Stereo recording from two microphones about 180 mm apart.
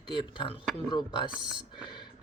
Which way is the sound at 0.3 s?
30° left (ahead or behind).